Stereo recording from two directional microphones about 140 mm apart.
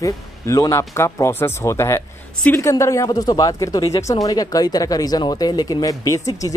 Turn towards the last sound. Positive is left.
turn(degrees=25)  # may be behind; listen again after turning